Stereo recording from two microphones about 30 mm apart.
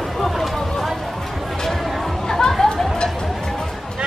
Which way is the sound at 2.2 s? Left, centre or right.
Left.